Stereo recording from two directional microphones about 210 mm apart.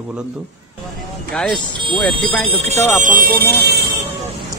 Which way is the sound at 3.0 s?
40° right (ahead or behind).